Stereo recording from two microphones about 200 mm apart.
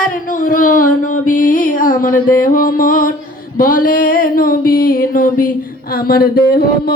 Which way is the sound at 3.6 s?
45° left (ahead or behind).